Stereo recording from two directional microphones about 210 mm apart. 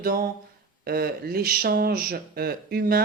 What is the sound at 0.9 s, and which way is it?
Speech, 45° right (ahead or behind).